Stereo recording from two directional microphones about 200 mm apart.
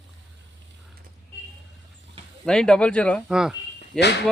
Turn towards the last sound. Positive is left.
turn(degrees=0)  # may be behind; listen again after turning